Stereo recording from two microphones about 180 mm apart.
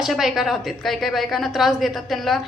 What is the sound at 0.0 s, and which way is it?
A woman's voice, centre (ahead or behind).